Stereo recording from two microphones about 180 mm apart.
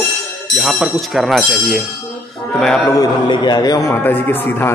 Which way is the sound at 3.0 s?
25° left (ahead or behind).